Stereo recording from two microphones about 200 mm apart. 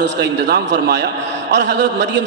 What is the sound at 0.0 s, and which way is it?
A man's voice, 55° right (ahead or behind).